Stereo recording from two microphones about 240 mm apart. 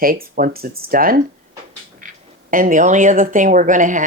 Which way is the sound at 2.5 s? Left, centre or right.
Right.